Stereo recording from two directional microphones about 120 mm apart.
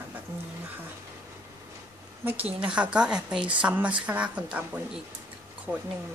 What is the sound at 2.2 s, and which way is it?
Speech, 15° right (ahead or behind).